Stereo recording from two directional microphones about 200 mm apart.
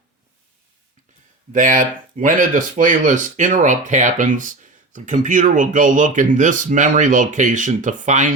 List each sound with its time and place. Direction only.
1.5 s speech: 40° right (ahead or behind)